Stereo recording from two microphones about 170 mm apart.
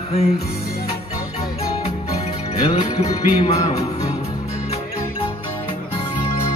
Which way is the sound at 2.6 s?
30° left (ahead or behind).